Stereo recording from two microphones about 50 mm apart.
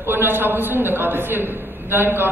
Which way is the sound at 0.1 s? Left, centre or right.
Right.